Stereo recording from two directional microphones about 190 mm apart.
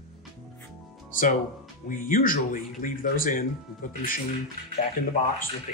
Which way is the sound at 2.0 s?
45° left (ahead or behind).